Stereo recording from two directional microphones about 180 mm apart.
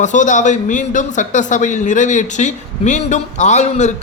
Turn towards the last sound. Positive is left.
turn(degrees=40)  # may be behind; listen again after turning